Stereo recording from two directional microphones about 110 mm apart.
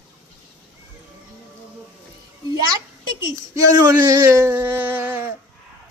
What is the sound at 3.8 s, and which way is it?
Speech, 35° right (ahead or behind).